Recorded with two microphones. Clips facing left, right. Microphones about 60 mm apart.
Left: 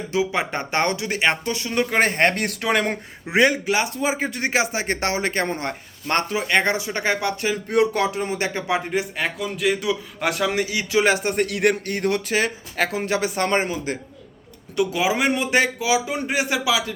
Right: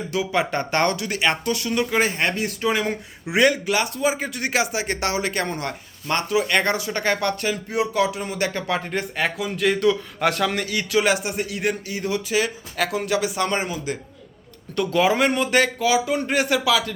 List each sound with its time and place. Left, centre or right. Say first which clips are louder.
0.1 s speech: even; left
1.9 s speech: left 5 dB; left
2.9 s speech: left 1 dB; left
6.5 s speech: left 1 dB; left
7.9 s speech: even; left; by 8.8 s centre
8.9 s speech: even; centre
11.0 s speech: left 4 dB; left
11.3 s speech: left 5 dB; left
12.3 s speech: even; left
14.8 s speech: right 2 dB; centre